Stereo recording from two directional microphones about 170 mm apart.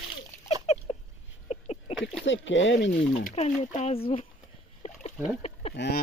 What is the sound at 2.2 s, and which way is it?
Speech, 90° left.